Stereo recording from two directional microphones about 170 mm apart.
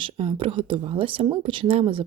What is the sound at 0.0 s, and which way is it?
Speech, 30° right (ahead or behind).